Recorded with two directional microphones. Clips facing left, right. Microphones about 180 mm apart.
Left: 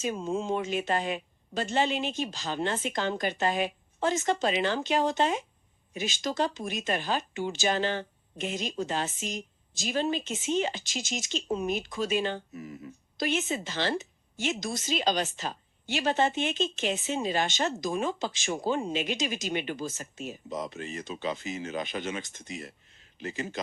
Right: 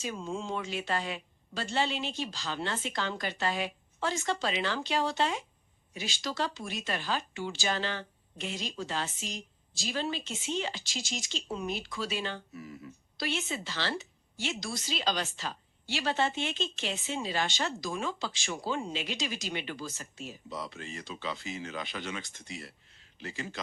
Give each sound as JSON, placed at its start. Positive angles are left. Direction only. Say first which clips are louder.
{"t": 0.0, "sound": "a woman's voice", "louder": "left 6 dB", "side_deg": 20}